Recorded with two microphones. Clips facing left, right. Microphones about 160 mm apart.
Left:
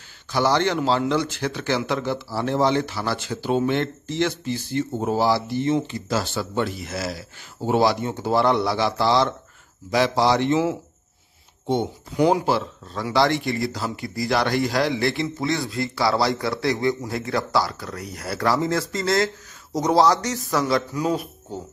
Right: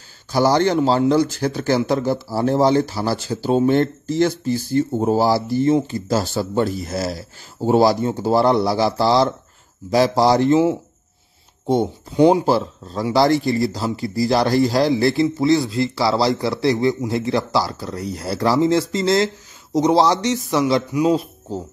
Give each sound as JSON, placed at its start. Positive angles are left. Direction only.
{"t": 0.3, "sound": "speech", "side_deg": -40}
{"t": 11.6, "sound": "speech", "side_deg": -40}
{"t": 12.2, "sound": "speech", "side_deg": -25}